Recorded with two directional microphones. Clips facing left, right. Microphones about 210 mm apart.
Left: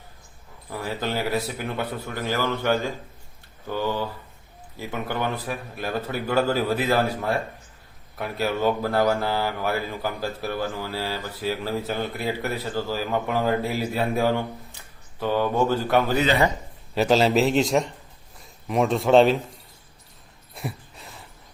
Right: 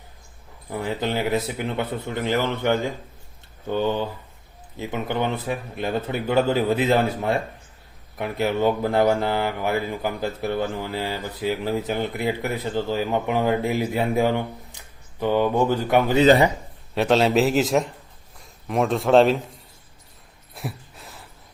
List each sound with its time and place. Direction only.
0.7 s a man's voice: 20° right (ahead or behind)
16.9 s a man's voice: centre (ahead or behind)
20.6 s a sound: centre (ahead or behind)